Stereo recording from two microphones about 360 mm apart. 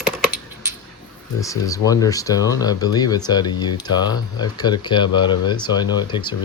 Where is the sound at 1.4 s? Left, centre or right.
Centre.